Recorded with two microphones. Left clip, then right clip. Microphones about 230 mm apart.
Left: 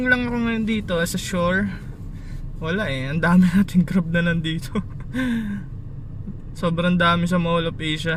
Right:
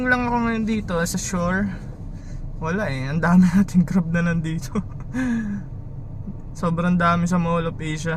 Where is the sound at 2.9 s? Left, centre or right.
Right.